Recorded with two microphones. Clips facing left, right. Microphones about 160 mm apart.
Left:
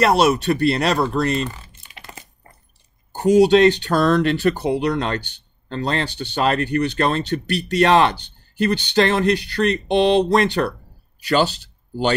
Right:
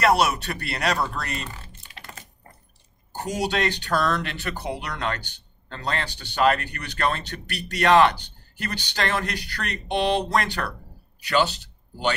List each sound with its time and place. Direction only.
0.0 s speech: 25° left (ahead or behind)
1.6 s computer keyboard: 15° left (ahead or behind)
3.1 s speech: 20° left (ahead or behind)